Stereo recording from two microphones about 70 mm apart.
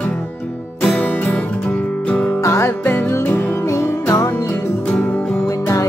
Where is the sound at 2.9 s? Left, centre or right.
Left.